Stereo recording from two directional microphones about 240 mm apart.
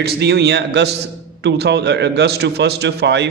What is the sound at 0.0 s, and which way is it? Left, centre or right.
A man's voice, right.